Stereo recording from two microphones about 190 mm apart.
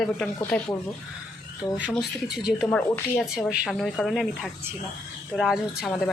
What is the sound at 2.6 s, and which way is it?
Speech, 10° left (ahead or behind).